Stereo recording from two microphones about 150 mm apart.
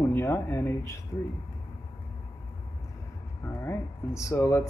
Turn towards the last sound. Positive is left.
turn(degrees=20)  # may be behind; listen again after turning